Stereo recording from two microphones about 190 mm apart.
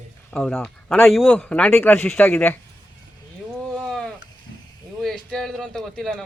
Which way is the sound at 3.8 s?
5° left (ahead or behind).